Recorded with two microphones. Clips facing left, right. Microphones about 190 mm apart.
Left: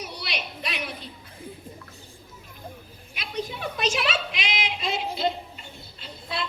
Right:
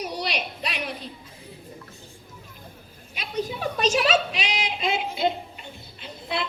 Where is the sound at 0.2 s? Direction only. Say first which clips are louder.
Right 5 dB; 40° right (ahead or behind).